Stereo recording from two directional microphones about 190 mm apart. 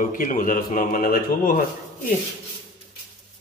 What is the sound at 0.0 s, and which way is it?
Speech, 45° left (ahead or behind).